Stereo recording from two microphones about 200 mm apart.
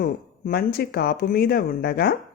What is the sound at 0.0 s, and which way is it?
Speech, 50° left (ahead or behind).